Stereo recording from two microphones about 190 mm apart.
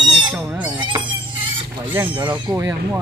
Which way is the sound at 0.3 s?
5° right (ahead or behind).